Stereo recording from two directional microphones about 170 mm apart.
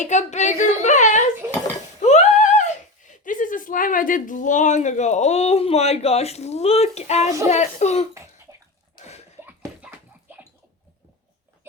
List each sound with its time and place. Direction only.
0.0 s speech: 45° left (ahead or behind)
8.1 s cough: 20° right (ahead or behind)
9.4 s a sound: 10° right (ahead or behind)